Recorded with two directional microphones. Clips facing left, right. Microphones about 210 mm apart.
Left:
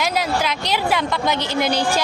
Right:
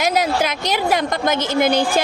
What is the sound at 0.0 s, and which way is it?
A woman's voice, 45° right (ahead or behind).